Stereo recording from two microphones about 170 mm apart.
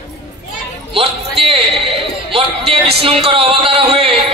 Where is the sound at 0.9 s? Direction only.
35° right (ahead or behind).